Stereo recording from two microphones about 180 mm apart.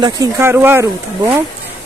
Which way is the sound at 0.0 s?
15° right (ahead or behind).